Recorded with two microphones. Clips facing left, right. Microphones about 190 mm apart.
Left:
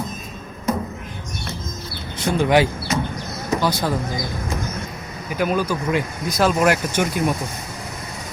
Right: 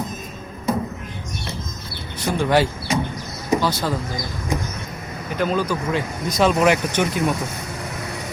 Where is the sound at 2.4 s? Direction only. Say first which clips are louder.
Left 2 dB; 15° left (ahead or behind).